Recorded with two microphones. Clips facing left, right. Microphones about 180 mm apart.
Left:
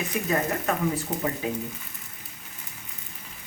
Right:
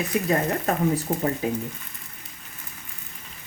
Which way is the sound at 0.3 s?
35° right (ahead or behind).